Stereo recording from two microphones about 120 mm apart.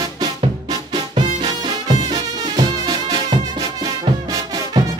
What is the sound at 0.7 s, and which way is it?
Music, 35° right (ahead or behind).